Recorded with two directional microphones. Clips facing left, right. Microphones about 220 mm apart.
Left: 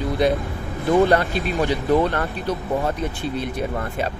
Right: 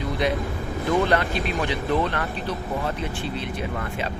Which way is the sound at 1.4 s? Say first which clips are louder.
Left 4 dB; 50° left (ahead or behind).